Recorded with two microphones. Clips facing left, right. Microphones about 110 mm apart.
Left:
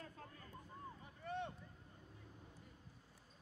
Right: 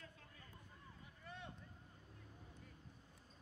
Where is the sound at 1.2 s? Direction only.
55° left (ahead or behind).